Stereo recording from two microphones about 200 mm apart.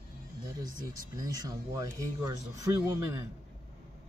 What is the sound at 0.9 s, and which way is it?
Speech, 20° right (ahead or behind).